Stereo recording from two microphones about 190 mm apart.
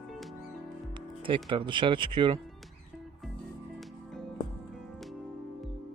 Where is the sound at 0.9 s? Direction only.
25° right (ahead or behind).